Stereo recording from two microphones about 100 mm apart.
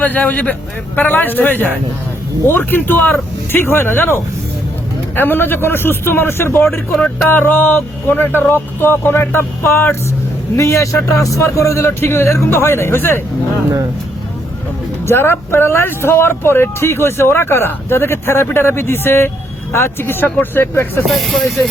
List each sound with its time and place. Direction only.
0.0 s a man's voice: 15° left (ahead or behind)
15.0 s speech: 25° left (ahead or behind)
21.1 s speech: centre (ahead or behind)